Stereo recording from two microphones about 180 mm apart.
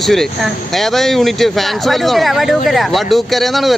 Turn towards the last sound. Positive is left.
turn(degrees=0)  # may be behind; listen again after turning